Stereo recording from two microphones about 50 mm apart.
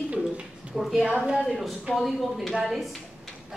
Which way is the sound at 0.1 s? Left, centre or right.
Right.